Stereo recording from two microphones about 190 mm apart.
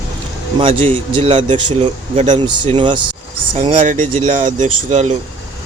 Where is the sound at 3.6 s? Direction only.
40° right (ahead or behind).